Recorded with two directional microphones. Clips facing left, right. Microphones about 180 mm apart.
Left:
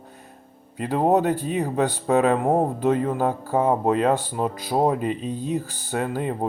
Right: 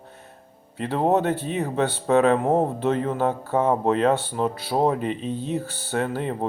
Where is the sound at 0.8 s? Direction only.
15° left (ahead or behind).